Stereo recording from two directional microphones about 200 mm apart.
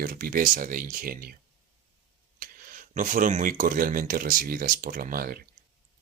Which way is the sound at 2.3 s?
45° right (ahead or behind).